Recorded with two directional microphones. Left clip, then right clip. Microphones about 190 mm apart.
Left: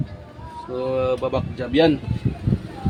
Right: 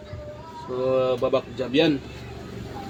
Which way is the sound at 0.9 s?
35° left (ahead or behind).